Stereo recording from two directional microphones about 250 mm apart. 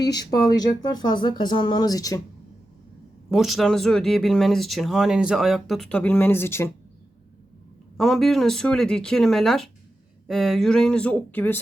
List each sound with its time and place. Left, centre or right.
0.1 s speech: centre
3.2 s speech: centre
7.9 s speech: centre